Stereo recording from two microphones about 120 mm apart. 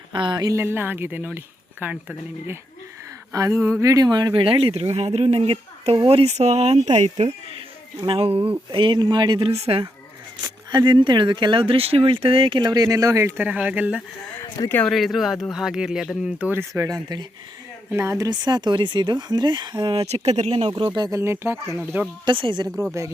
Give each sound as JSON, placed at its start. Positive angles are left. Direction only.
{"t": 0.1, "sound": "speech", "side_deg": -40}
{"t": 0.6, "sound": "speech", "side_deg": -20}
{"t": 3.3, "sound": "speech", "side_deg": -25}
{"t": 6.9, "sound": "speech", "side_deg": -75}
{"t": 8.0, "sound": "speech", "side_deg": -50}
{"t": 9.6, "sound": "speech", "side_deg": -55}
{"t": 10.7, "sound": "speech", "side_deg": -40}
{"t": 14.8, "sound": "speech", "side_deg": 0}
{"t": 16.4, "sound": "speech", "side_deg": -20}
{"t": 17.9, "sound": "speech", "side_deg": -20}
{"t": 20.1, "sound": "speech", "side_deg": -65}
{"t": 21.2, "sound": "speech", "side_deg": -20}
{"t": 22.3, "sound": "speech", "side_deg": -45}
{"t": 22.7, "sound": "speech", "side_deg": -5}